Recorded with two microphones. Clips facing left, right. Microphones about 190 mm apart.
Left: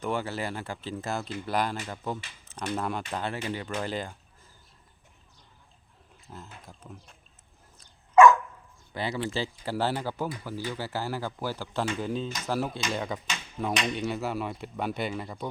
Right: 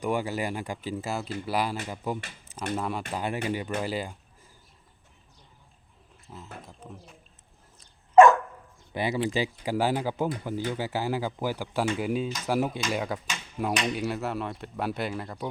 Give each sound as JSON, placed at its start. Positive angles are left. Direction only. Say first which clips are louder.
{"t": 0.0, "sound": "speech", "louder": "right 3 dB", "side_deg": -15}
{"t": 8.9, "sound": "speech", "louder": "right 4 dB", "side_deg": -20}